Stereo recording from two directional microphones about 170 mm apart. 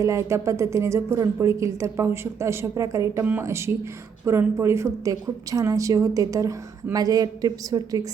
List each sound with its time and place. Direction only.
0.0 s a woman's voice: 15° right (ahead or behind)